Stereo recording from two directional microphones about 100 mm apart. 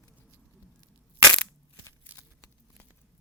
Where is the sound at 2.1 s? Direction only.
15° right (ahead or behind).